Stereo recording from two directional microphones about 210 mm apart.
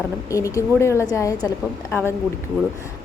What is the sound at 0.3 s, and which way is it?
Speech, 15° left (ahead or behind).